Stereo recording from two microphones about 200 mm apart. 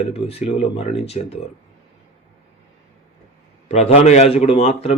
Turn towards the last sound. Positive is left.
turn(degrees=30)  # may be behind; listen again after turning